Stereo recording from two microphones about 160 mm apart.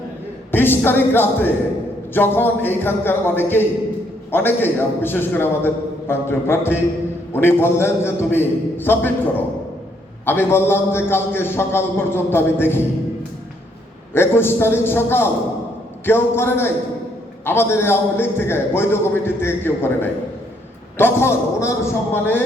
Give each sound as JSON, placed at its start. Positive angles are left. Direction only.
{"t": 0.5, "sound": "a man's voice", "side_deg": 15}
{"t": 14.1, "sound": "a man's voice", "side_deg": 15}